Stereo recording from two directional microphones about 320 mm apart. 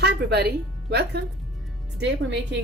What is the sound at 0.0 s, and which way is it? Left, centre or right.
Music, right.